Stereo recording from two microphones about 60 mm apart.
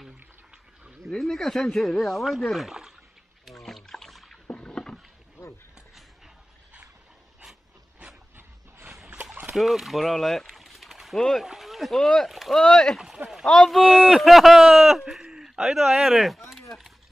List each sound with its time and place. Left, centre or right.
1.0 s speech: centre
3.4 s rowboat: centre
4.5 s rowboat: centre
8.4 s a sound: right
9.6 s speech: centre
13.0 s rowboat: centre
13.5 s speech: centre